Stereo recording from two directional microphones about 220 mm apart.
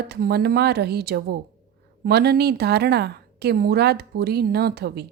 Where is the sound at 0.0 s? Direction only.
45° right (ahead or behind).